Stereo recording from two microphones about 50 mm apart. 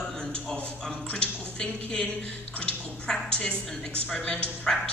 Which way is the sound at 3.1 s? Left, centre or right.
Centre.